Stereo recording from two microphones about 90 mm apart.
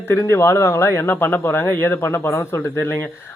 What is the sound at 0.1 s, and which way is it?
Speech, 25° left (ahead or behind).